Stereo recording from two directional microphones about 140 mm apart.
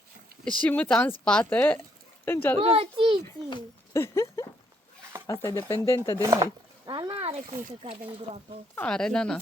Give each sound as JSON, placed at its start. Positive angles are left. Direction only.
{"t": 0.6, "sound": "speech", "side_deg": 10}
{"t": 2.6, "sound": "speech", "side_deg": -45}
{"t": 3.9, "sound": "speech", "side_deg": 20}
{"t": 6.1, "sound": "speech", "side_deg": -20}
{"t": 6.9, "sound": "speech", "side_deg": -35}
{"t": 8.7, "sound": "speech", "side_deg": 10}